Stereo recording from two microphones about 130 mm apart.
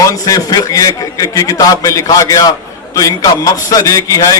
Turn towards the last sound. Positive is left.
turn(degrees=25)  # may be behind; listen again after turning